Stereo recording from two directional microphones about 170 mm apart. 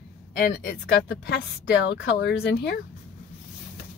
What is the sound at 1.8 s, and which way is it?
Speech, 85° left.